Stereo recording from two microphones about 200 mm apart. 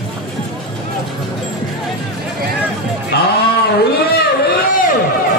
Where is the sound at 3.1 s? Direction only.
55° left (ahead or behind).